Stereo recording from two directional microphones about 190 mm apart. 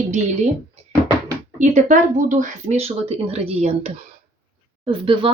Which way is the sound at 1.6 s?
40° right (ahead or behind).